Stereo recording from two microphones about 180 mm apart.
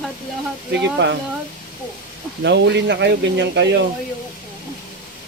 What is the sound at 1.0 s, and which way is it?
Speech, 75° right (ahead or behind).